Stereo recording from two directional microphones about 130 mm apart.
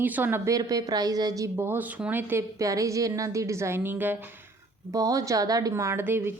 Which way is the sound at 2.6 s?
25° right (ahead or behind).